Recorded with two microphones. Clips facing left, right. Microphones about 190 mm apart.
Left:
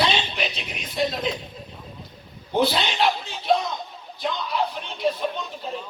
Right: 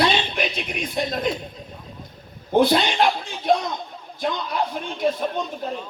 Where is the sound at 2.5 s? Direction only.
50° right (ahead or behind).